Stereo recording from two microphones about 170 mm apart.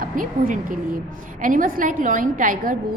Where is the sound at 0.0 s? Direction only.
55° right (ahead or behind).